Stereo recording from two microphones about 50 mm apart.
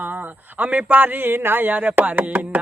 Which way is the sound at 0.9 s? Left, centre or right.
Right.